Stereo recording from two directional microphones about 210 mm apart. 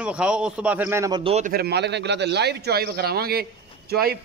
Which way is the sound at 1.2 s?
30° right (ahead or behind).